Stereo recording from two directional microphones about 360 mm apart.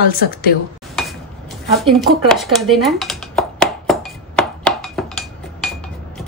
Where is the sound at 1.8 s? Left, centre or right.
Centre.